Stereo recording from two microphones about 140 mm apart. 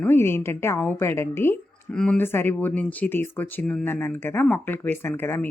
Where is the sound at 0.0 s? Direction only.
15° left (ahead or behind).